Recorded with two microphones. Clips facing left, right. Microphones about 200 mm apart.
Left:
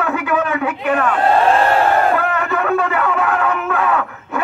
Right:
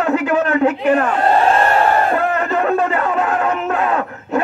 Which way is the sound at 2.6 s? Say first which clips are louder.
Right 1 dB; 25° right (ahead or behind).